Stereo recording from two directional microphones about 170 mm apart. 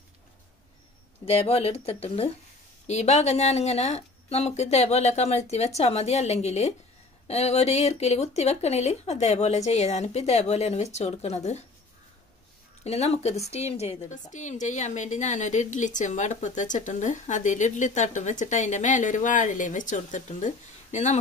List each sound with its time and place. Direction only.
1.2 s speech: 35° left (ahead or behind)
12.8 s a woman's voice: 40° left (ahead or behind)